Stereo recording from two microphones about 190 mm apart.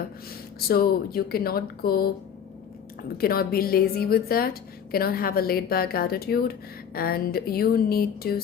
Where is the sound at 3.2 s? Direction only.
55° left (ahead or behind).